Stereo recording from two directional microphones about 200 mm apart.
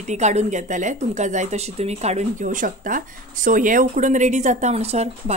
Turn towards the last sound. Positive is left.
turn(degrees=-30)  # may be behind; listen again after turning